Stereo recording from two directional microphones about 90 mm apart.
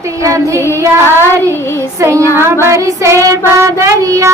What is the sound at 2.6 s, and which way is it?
Child singing, 30° right (ahead or behind).